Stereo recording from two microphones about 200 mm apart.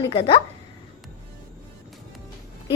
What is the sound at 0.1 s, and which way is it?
Speech, 30° left (ahead or behind).